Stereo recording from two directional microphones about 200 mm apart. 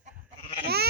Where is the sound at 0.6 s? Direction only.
55° right (ahead or behind).